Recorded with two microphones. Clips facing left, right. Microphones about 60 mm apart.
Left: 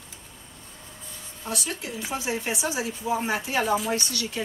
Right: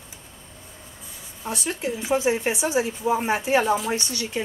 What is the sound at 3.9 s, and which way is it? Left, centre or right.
Speech, right.